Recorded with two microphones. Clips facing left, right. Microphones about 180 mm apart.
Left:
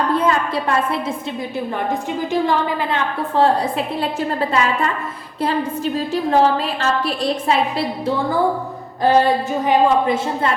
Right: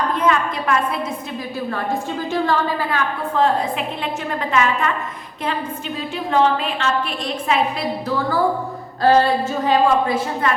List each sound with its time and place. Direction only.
0.2 s a sound: 30° left (ahead or behind)
1.5 s a woman's voice: 20° left (ahead or behind)
3.3 s a woman's voice: 35° left (ahead or behind)
9.0 s a woman's voice: 15° left (ahead or behind)